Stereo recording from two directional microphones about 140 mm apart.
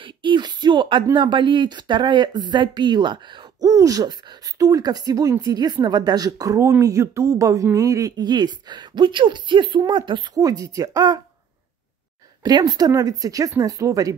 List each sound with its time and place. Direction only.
0.0 s a sound: 35° right (ahead or behind)
1.1 s speech: 35° right (ahead or behind)
12.4 s speech: 30° right (ahead or behind)